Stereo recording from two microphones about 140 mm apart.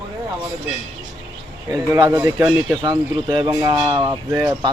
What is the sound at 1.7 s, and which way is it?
Speech, 25° right (ahead or behind).